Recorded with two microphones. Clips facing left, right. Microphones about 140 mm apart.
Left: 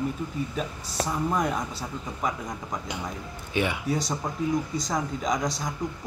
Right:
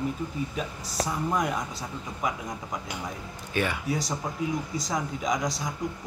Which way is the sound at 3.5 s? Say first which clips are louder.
Left 1 dB; 15° left (ahead or behind).